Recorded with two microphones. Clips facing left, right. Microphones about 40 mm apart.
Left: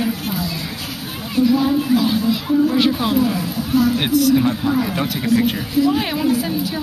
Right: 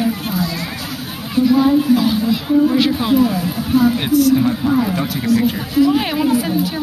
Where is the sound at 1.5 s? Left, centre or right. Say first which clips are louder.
Right 5 dB; centre.